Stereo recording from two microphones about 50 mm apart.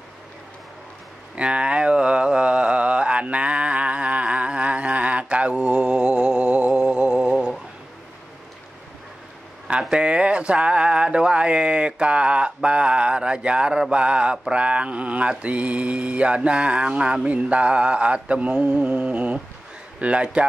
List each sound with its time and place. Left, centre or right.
1.3 s mantra: right
9.7 s mantra: right